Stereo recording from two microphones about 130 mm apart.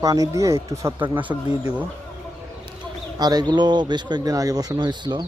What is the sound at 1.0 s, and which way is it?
Speech, 40° right (ahead or behind).